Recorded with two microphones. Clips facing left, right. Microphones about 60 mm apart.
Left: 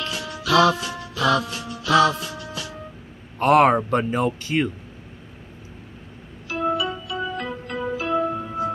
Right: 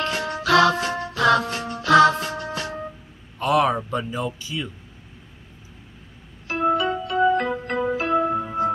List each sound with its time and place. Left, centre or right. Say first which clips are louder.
0.0 s music: right 5 dB; right
3.3 s speech: left 4 dB; left
6.7 s music: right 3 dB; right
8.2 s music: right 2 dB; right